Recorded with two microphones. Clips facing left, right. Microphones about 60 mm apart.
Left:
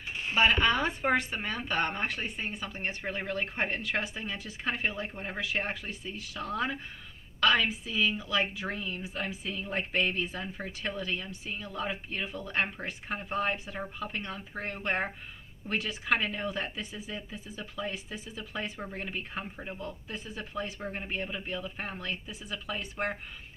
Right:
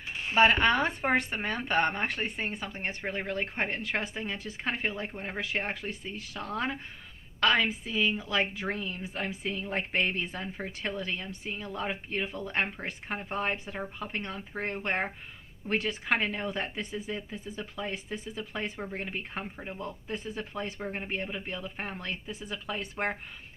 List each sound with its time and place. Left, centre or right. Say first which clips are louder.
0.3 s a woman's voice: right 3 dB; right
5.4 s a woman's voice: even; right
17.9 s a woman's voice: right 3 dB; right